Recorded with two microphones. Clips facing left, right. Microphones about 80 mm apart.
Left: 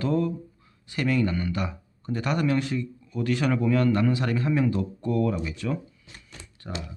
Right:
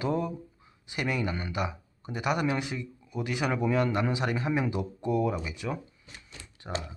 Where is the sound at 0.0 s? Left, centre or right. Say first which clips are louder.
Left 4 dB; centre.